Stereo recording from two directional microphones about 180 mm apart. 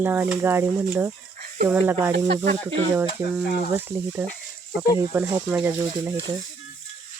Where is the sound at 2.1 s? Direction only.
65° right (ahead or behind).